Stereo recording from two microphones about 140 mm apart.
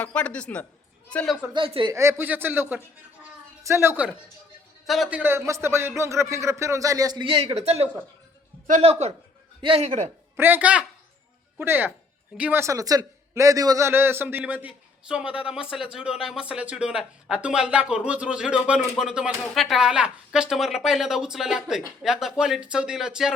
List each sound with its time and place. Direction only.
0.0 s speech: 10° left (ahead or behind)
1.5 s speech: 40° right (ahead or behind)
1.9 s a man's voice: 20° right (ahead or behind); by 9.8 s 40° right (ahead or behind)
9.8 s a man's voice: 55° right (ahead or behind)
10.3 s a man's voice: 15° right (ahead or behind)